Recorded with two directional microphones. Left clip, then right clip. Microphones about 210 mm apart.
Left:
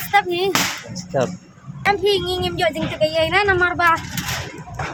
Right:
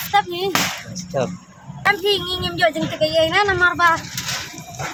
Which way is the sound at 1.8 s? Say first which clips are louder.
Even; 5° left (ahead or behind).